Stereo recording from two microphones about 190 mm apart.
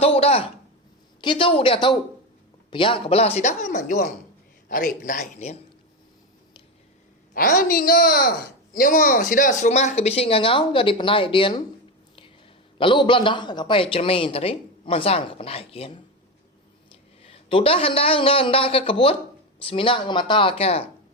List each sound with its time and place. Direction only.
0.0 s speech: 30° left (ahead or behind)
7.3 s a woman's voice: 50° left (ahead or behind); by 11.6 s 25° left (ahead or behind)
12.8 s speech: 25° left (ahead or behind)
17.2 s speech: 30° left (ahead or behind)